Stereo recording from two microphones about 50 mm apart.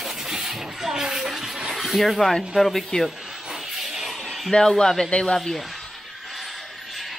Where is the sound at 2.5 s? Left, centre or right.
Centre.